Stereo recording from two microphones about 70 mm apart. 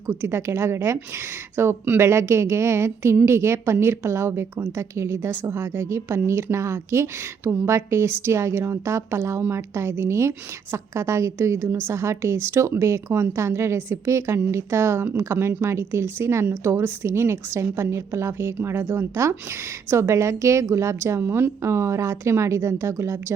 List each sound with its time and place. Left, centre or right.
0.1 s a woman's voice: right